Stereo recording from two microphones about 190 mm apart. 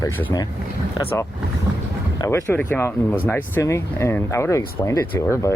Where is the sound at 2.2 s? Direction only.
15° left (ahead or behind).